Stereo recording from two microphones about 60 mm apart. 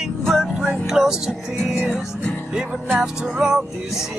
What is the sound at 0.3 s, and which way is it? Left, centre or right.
Music, centre.